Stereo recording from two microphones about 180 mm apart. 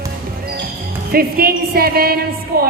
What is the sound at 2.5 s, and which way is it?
Music, 55° right (ahead or behind).